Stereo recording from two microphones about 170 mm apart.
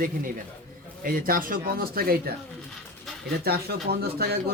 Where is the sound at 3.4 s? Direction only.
65° right (ahead or behind).